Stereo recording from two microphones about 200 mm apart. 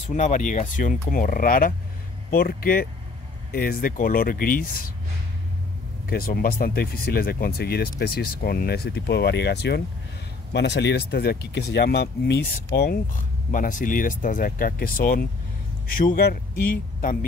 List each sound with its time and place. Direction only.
0.1 s speech: 40° left (ahead or behind)
6.0 s speech: 50° left (ahead or behind)